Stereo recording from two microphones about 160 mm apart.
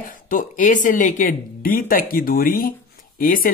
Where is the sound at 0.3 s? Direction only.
55° left (ahead or behind).